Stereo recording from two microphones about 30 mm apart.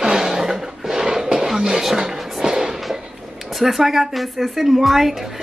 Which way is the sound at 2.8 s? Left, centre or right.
Centre.